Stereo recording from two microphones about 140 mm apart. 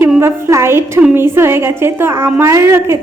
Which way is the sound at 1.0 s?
15° right (ahead or behind).